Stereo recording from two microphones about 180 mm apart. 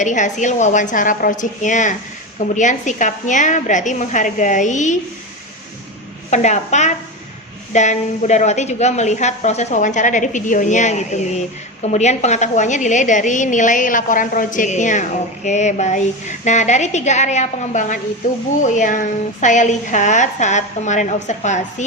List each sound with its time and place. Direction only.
0.0 s a woman's voice: 45° left (ahead or behind)
6.3 s a woman's voice: 40° left (ahead or behind)